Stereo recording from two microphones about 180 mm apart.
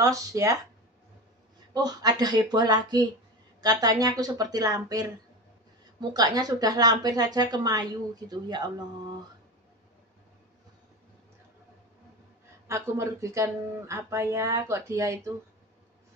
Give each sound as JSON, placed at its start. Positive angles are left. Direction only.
{"t": 0.0, "sound": "speech", "side_deg": -20}
{"t": 1.7, "sound": "a woman's voice", "side_deg": -20}
{"t": 12.6, "sound": "speech", "side_deg": -15}